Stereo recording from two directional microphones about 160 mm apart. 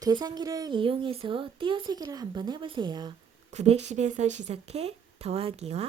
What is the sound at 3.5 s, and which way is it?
Speech, 45° right (ahead or behind).